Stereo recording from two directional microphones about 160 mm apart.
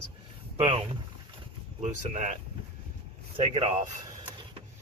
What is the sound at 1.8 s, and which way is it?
Speech, 45° right (ahead or behind).